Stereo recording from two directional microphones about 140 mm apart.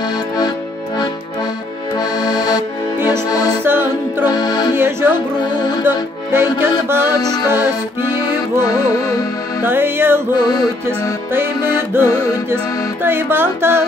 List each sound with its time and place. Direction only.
2.0 s music: 30° left (ahead or behind)
3.1 s accordion: 25° left (ahead or behind)
3.6 s music: 15° right (ahead or behind)
4.3 s music: 30° left (ahead or behind)
4.7 s music: 15° right (ahead or behind)
5.4 s music: 30° left (ahead or behind)
5.9 s music: 15° right (ahead or behind)
7.2 s music: 30° left (ahead or behind)
8.5 s music: 25° left (ahead or behind)
9.6 s music: 15° right (ahead or behind)
10.3 s music: 30° left (ahead or behind)
11.9 s music: 15° right (ahead or behind)